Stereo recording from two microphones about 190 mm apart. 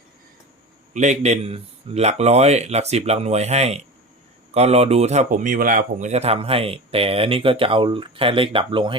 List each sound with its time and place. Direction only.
0.9 s speech: 35° right (ahead or behind)